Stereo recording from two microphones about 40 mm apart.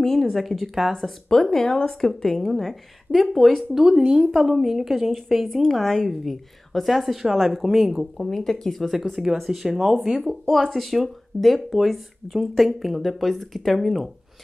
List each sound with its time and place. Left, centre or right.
0.0 s speech: centre
1.6 s a woman's voice: centre
10.2 s speech: centre